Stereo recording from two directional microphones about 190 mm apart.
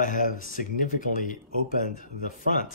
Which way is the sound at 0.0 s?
45° left (ahead or behind).